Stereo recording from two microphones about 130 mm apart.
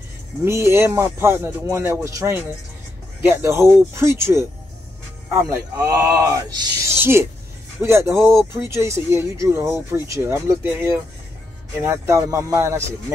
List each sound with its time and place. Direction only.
0.5 s speech: 20° right (ahead or behind)
7.0 s speech: 20° right (ahead or behind)